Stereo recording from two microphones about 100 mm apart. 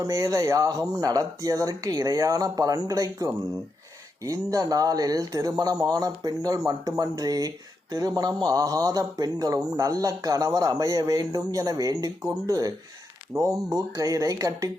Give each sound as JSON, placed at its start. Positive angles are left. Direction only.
{"t": 0.0, "sound": "speech", "side_deg": -30}